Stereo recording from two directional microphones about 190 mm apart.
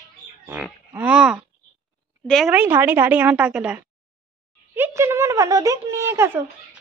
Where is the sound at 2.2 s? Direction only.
Centre (ahead or behind).